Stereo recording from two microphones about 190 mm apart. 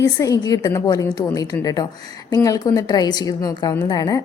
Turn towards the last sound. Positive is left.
turn(degrees=20)  # may be behind; listen again after turning